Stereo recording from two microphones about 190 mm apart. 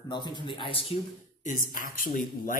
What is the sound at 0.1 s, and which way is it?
Speech, 25° left (ahead or behind).